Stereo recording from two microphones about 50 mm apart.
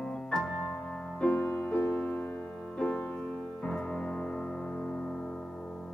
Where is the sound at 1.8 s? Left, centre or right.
Left.